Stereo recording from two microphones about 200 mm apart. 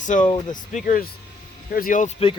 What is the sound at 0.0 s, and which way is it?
Speech, 40° left (ahead or behind).